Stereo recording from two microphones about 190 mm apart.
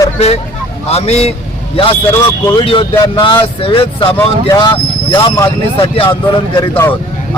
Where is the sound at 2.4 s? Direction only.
25° left (ahead or behind).